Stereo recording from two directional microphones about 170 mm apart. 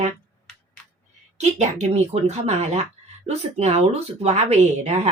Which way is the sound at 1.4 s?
40° right (ahead or behind).